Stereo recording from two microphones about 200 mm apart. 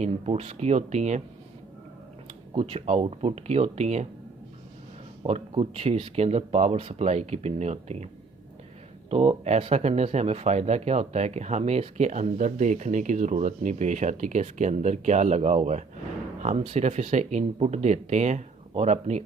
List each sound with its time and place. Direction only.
0.0 s speech: 30° right (ahead or behind)
2.6 s speech: 30° right (ahead or behind)
5.2 s speech: 30° right (ahead or behind)